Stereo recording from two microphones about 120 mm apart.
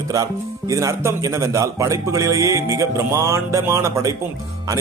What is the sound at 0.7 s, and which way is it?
A man's voice, 25° right (ahead or behind).